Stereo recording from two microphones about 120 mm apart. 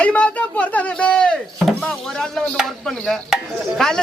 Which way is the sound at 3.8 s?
5° left (ahead or behind).